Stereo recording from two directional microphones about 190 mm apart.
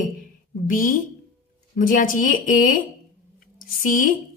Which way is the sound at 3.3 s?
45° left (ahead or behind).